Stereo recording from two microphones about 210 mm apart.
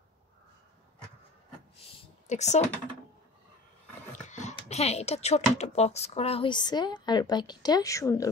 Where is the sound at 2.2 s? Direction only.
35° left (ahead or behind).